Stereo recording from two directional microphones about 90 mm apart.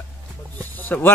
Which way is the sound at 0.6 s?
20° left (ahead or behind).